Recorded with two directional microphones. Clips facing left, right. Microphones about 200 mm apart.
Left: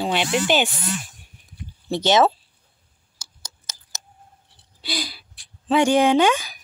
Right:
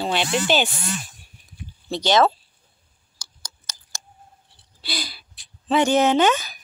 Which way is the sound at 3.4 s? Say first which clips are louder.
Even; 20° left (ahead or behind).